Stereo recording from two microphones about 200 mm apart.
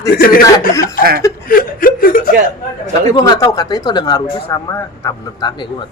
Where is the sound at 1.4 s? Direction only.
45° left (ahead or behind).